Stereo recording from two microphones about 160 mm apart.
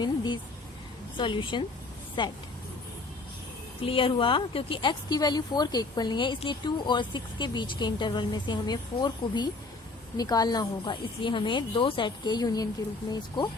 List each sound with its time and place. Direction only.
1.1 s speech: 30° left (ahead or behind)
3.8 s speech: 35° left (ahead or behind)